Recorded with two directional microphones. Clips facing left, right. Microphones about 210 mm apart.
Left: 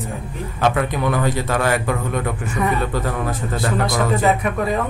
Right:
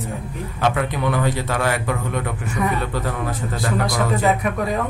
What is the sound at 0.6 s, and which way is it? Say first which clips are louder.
A man's voice: left 2 dB; 45° left (ahead or behind).